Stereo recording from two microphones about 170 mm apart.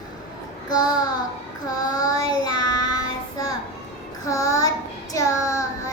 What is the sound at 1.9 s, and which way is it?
Child singing, 20° left (ahead or behind).